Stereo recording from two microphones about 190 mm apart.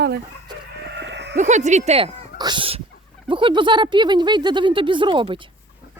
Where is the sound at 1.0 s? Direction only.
65° right (ahead or behind).